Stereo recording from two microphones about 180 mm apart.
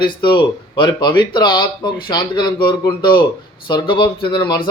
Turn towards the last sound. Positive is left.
turn(degrees=25)  # may be behind; listen again after turning